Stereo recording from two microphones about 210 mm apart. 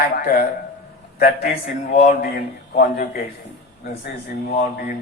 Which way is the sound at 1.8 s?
35° left (ahead or behind).